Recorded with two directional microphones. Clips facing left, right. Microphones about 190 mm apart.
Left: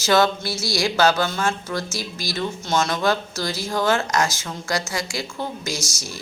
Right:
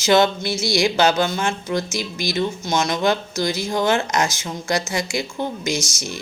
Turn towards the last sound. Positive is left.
turn(degrees=-20)  # may be behind; listen again after turning